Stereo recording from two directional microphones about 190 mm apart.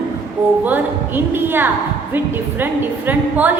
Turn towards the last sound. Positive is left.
turn(degrees=-10)  # may be behind; listen again after turning